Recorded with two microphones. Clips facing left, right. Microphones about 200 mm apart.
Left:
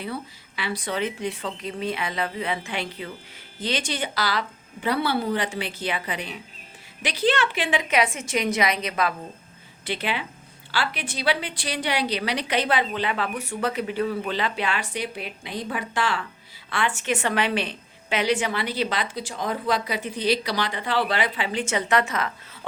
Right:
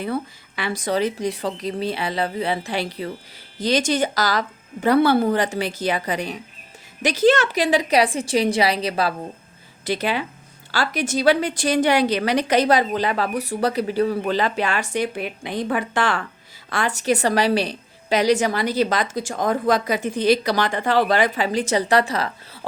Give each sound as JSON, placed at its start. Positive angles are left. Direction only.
{"t": 0.0, "sound": "a woman's voice", "side_deg": -50}
{"t": 16.6, "sound": "a woman's voice", "side_deg": -40}